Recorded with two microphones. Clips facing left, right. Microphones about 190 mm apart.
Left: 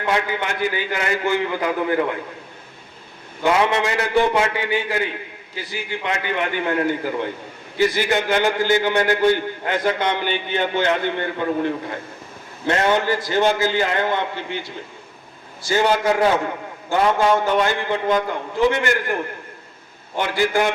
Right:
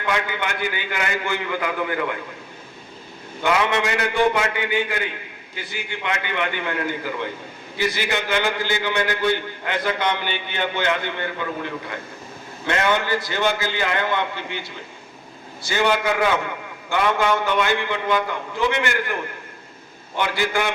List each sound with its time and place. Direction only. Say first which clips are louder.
0.0 s a man's voice: left 3 dB; 35° left (ahead or behind)
3.4 s a man's voice: left 2 dB; 30° left (ahead or behind)
15.6 s a man's voice: left 3 dB; 40° left (ahead or behind)
20.1 s a man's voice: left 3 dB; 40° left (ahead or behind)